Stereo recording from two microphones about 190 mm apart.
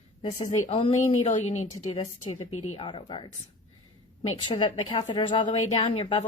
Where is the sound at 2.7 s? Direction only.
25° left (ahead or behind).